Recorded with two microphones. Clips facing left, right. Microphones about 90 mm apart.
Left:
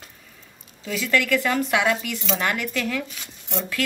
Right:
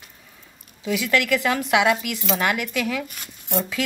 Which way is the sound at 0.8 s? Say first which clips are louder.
Right 1 dB; 15° right (ahead or behind).